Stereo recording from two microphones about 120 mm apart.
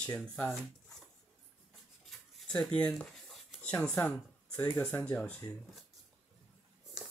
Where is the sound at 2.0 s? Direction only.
5° left (ahead or behind).